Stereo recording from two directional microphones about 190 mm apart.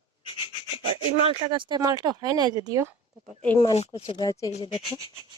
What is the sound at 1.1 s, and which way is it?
Speech, 25° right (ahead or behind).